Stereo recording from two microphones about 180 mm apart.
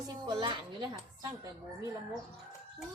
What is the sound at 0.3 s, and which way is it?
Speech, 25° right (ahead or behind).